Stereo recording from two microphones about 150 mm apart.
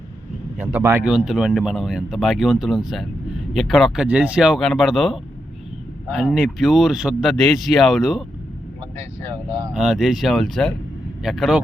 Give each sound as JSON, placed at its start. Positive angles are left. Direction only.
{"t": 0.8, "sound": "speech", "side_deg": -20}
{"t": 1.0, "sound": "speech", "side_deg": -5}
{"t": 9.7, "sound": "speech", "side_deg": -5}